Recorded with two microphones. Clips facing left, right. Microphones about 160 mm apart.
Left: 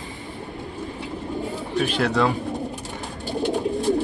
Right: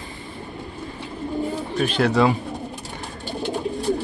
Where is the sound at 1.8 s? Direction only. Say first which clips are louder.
Right 3 dB; centre (ahead or behind).